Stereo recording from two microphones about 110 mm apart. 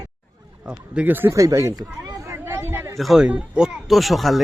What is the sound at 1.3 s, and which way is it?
Speech, 30° right (ahead or behind).